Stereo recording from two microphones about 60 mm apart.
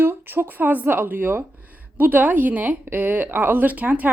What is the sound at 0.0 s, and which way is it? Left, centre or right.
A woman's voice, right.